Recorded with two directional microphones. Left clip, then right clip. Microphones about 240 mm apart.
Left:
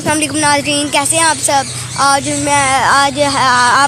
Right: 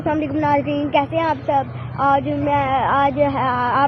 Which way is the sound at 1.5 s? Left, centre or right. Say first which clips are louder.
Left 5 dB; left.